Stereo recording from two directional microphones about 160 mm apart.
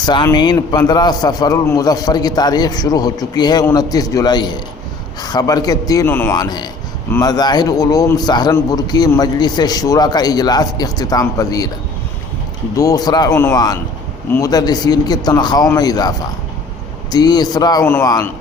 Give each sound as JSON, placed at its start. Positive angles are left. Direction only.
{"t": 0.0, "sound": "a man's voice", "side_deg": 25}
{"t": 12.7, "sound": "a man's voice", "side_deg": 20}